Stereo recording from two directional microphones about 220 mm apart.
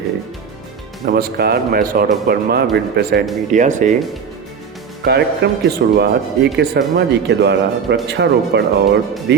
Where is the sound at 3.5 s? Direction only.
35° right (ahead or behind).